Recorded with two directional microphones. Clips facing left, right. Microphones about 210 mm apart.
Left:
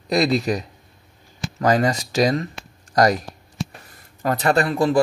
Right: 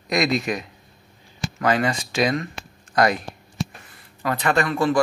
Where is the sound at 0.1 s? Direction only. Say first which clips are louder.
Left 3 dB; 35° left (ahead or behind).